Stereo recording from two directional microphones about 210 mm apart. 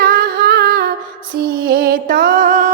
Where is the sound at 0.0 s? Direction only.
45° right (ahead or behind).